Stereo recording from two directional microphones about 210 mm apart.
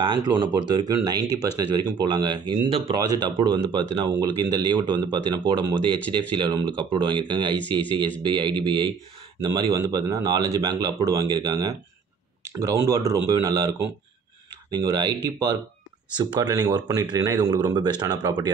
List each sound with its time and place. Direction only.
0.0 s a man's voice: 20° right (ahead or behind)